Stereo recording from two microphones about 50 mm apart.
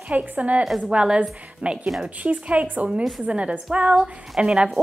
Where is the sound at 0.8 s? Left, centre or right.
Right.